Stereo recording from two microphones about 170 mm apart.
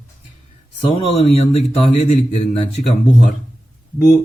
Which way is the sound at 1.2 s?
35° left (ahead or behind).